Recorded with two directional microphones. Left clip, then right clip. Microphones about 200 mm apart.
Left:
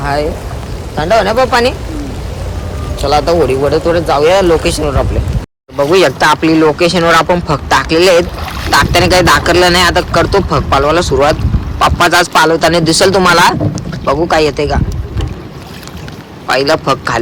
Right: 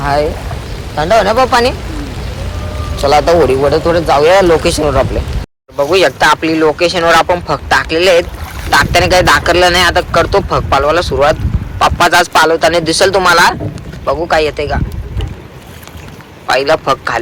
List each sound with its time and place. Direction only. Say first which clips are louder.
0.0 s speech: right 2 dB; 10° left (ahead or behind)
3.0 s speech: right 2 dB; centre (ahead or behind)
16.5 s a man's voice: even; 10° left (ahead or behind)